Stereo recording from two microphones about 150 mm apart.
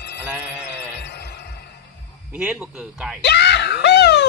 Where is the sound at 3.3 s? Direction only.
90° left.